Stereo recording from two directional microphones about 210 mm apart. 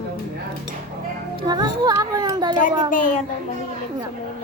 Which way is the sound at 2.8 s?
40° left (ahead or behind).